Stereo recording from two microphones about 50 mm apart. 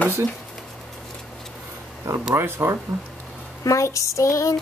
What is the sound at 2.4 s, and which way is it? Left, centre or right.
Speech, right.